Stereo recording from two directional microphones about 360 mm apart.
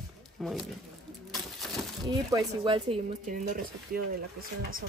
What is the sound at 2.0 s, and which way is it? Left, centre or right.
Speech, centre.